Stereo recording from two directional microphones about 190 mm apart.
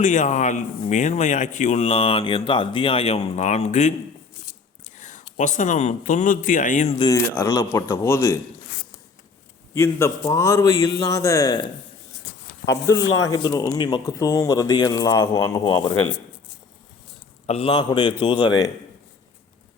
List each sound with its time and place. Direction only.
0.0 s speech: 40° left (ahead or behind)
7.0 s a man's voice: 15° left (ahead or behind)
9.7 s a man's voice: 15° left (ahead or behind)
12.6 s speech: 60° left (ahead or behind)
13.5 s speech: 20° left (ahead or behind)
17.4 s speech: 30° left (ahead or behind)